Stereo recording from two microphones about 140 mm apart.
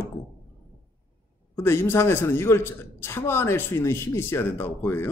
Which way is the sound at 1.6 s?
20° left (ahead or behind).